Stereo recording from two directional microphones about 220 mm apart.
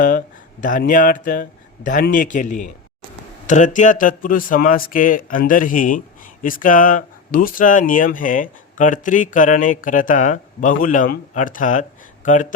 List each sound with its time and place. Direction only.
0.0 s speech: 40° left (ahead or behind)